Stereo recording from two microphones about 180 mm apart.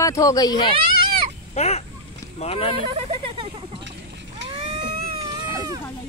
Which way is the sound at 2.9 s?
30° right (ahead or behind).